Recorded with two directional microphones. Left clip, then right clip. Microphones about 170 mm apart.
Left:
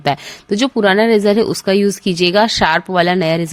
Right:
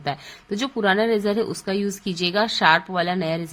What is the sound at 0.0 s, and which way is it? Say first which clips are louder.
Speech: left 11 dB; 45° left (ahead or behind).